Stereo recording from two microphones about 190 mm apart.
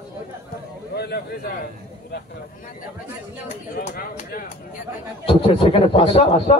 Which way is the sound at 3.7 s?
45° left (ahead or behind).